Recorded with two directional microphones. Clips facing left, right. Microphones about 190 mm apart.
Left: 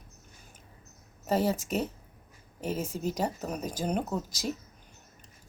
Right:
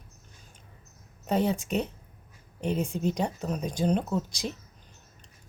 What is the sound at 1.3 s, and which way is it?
Speech, 5° left (ahead or behind).